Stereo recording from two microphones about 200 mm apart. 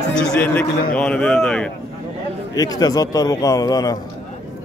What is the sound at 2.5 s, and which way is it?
A man's voice, 20° left (ahead or behind).